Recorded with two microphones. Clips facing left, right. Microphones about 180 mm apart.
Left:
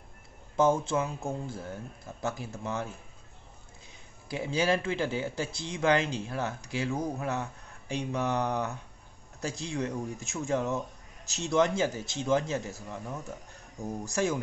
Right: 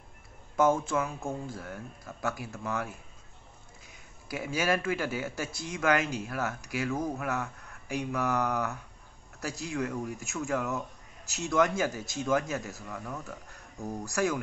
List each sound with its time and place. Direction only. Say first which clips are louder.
0.6 s a man's voice: even; 30° left (ahead or behind)
4.3 s a man's voice: left 2 dB; 25° left (ahead or behind)